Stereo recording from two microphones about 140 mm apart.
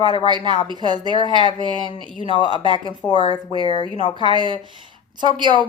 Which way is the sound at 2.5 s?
35° right (ahead or behind).